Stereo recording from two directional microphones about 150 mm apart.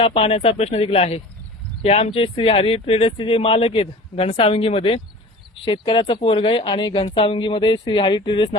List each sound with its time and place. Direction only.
0.0 s speech: 40° left (ahead or behind)